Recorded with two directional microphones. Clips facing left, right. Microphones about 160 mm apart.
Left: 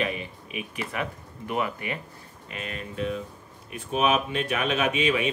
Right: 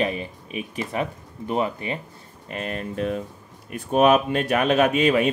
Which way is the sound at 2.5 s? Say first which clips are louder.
Right 7 dB; 45° right (ahead or behind).